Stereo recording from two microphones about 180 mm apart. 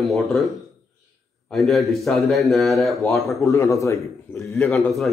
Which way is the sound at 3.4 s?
15° left (ahead or behind).